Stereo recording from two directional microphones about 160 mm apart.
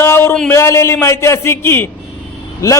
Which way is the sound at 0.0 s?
15° left (ahead or behind).